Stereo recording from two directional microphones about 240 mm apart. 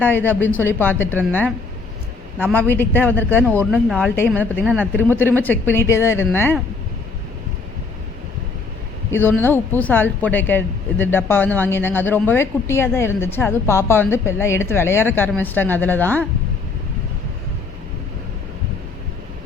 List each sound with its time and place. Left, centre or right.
0.0 s speech: centre
9.0 s speech: centre